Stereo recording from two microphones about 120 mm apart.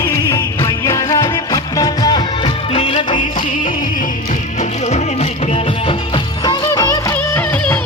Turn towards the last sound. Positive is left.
turn(degrees=15)  # may be behind; listen again after turning